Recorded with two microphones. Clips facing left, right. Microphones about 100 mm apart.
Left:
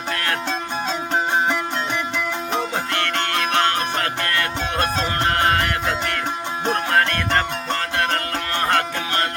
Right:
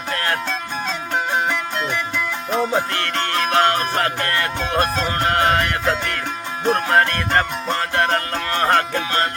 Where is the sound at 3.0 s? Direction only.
30° right (ahead or behind).